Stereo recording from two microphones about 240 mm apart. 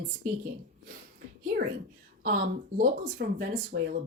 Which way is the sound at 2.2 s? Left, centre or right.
Right.